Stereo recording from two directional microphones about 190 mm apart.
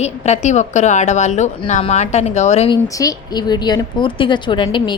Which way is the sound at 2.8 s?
20° left (ahead or behind).